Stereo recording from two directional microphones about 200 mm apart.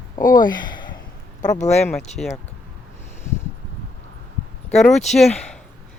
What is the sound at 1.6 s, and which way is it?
Speech, 35° left (ahead or behind).